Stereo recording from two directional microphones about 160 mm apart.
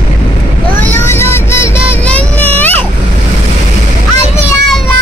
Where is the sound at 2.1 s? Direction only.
10° left (ahead or behind).